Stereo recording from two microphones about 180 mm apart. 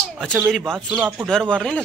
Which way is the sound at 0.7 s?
5° right (ahead or behind).